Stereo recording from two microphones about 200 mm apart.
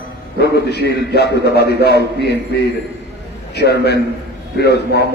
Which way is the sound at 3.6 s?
55° left (ahead or behind).